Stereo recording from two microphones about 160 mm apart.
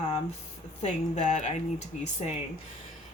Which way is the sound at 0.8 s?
45° left (ahead or behind).